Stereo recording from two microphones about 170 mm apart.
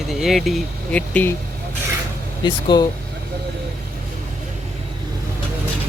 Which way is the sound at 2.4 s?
25° left (ahead or behind).